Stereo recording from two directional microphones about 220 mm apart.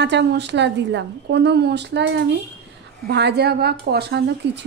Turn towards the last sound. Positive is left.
turn(degrees=-50)  # may be behind; listen again after turning